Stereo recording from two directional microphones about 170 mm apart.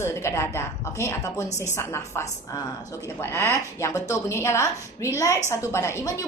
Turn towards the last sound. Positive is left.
turn(degrees=15)  # may be behind; listen again after turning